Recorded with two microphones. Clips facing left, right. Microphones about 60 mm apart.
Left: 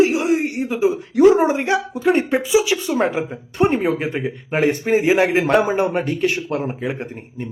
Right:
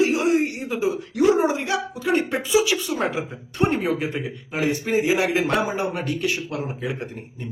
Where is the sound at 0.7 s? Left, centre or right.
Left.